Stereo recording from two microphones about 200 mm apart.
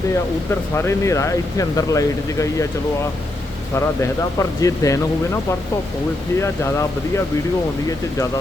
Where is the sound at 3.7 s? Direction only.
15° left (ahead or behind).